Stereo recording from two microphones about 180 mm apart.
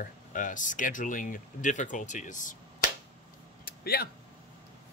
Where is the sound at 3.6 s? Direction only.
55° left (ahead or behind).